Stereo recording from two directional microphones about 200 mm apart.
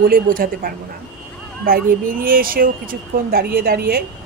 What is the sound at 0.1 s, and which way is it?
A woman's voice, 45° right (ahead or behind).